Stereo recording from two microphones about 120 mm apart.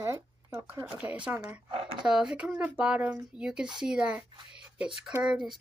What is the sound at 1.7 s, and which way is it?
Speech, 55° right (ahead or behind).